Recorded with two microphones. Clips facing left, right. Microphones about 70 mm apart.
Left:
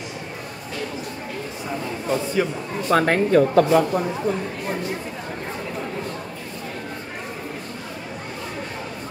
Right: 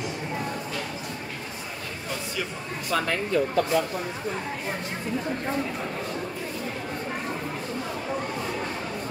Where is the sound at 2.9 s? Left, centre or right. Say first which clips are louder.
Left 8 dB; left.